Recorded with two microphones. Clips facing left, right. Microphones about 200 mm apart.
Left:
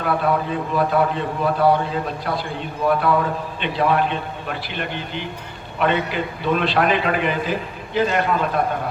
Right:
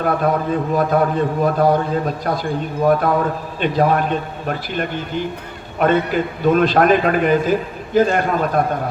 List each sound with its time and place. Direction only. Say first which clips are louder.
0.0 s a man's voice: right 3 dB; 45° right (ahead or behind)